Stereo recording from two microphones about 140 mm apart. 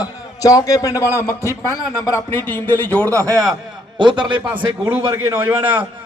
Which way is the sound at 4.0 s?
35° right (ahead or behind).